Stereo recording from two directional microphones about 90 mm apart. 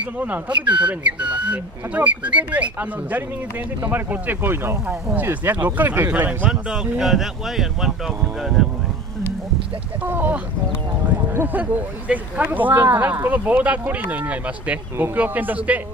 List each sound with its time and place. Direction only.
0.0 s speech: 15° right (ahead or behind)
10.0 s speech: 20° right (ahead or behind)